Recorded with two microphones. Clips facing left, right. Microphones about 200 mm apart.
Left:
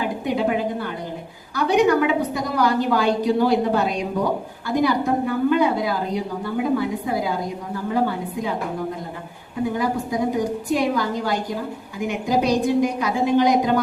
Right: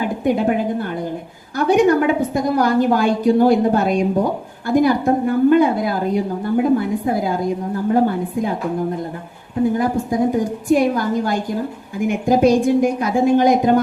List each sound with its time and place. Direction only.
0.0 s a woman's voice: 50° right (ahead or behind)
9.7 s a woman's voice: 50° right (ahead or behind)